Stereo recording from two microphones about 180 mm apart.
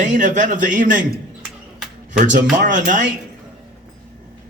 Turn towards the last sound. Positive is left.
turn(degrees=-45)  # may be behind; listen again after turning